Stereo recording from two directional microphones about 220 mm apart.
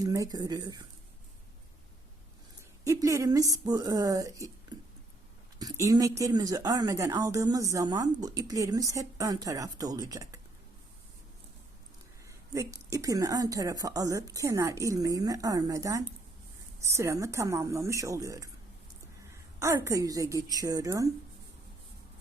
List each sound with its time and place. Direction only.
0.0 s speech: 15° right (ahead or behind)
2.8 s speech: 15° right (ahead or behind)
12.9 s speech: 15° right (ahead or behind)
19.5 s speech: 10° right (ahead or behind)